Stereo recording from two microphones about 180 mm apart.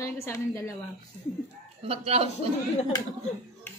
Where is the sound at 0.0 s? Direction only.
15° left (ahead or behind).